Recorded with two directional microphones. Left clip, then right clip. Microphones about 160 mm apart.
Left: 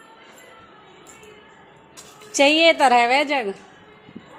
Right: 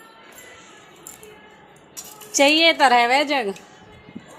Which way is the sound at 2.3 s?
5° left (ahead or behind).